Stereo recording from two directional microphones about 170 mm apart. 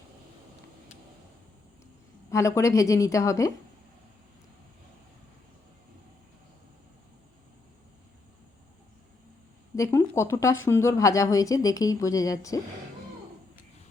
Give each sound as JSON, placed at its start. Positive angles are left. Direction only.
{"t": 2.3, "sound": "a woman's voice", "side_deg": 15}
{"t": 9.7, "sound": "a woman's voice", "side_deg": 20}